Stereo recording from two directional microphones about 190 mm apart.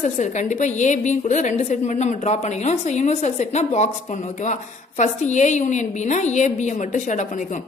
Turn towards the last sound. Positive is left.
turn(degrees=40)  # may be behind; listen again after turning